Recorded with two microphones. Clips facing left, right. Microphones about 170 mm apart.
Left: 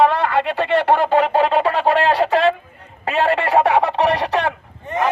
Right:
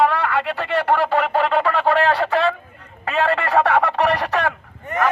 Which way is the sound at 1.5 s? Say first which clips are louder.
Left 2 dB; 20° left (ahead or behind).